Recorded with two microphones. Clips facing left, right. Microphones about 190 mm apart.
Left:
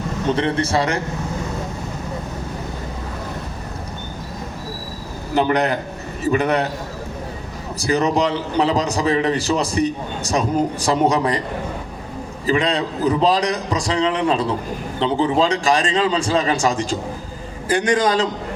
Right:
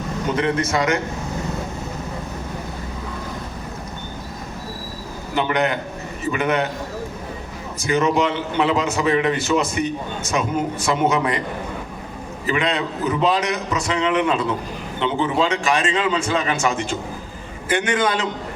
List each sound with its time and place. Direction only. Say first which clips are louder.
0.3 s a man's voice: left 2 dB; 30° left (ahead or behind)
5.3 s a man's voice: left 3 dB; 35° left (ahead or behind)
7.8 s a man's voice: left 1 dB; 35° left (ahead or behind)
12.5 s a man's voice: left 3 dB; 35° left (ahead or behind)